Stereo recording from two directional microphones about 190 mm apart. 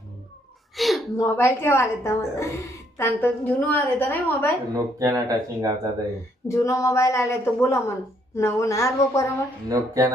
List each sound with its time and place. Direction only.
0.8 s a sound: centre (ahead or behind)
1.1 s a woman's voice: 15° left (ahead or behind)
4.7 s speech: 20° right (ahead or behind)
6.5 s a woman's voice: 15° left (ahead or behind)
9.6 s speech: 20° right (ahead or behind)